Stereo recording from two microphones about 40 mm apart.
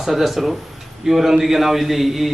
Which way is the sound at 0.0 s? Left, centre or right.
Centre.